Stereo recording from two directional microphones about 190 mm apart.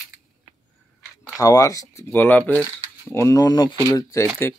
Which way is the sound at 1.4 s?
20° left (ahead or behind).